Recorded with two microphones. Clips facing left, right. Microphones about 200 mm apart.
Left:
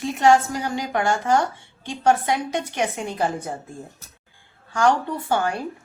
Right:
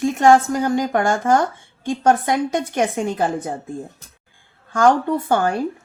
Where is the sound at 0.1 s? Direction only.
50° right (ahead or behind).